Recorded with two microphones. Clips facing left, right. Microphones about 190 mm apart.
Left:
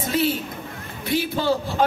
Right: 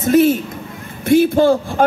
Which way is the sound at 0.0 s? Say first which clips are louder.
Right 10 dB; 45° right (ahead or behind).